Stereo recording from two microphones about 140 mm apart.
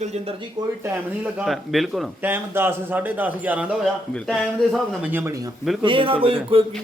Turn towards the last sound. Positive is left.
turn(degrees=-45)  # may be behind; listen again after turning